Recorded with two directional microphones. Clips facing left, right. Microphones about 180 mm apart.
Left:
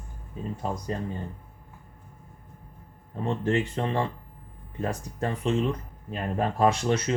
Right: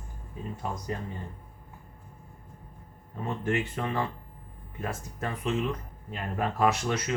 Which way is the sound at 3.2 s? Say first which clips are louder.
Left 4 dB; 30° left (ahead or behind).